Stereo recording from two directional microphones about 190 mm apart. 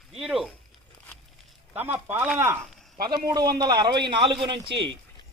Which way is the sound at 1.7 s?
10° right (ahead or behind).